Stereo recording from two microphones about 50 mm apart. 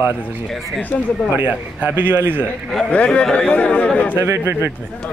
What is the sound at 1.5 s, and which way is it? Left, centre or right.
A man's voice, right.